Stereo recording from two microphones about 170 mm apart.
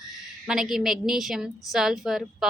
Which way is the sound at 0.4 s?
Centre (ahead or behind).